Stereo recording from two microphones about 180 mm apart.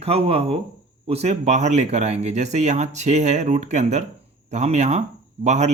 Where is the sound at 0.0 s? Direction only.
35° right (ahead or behind).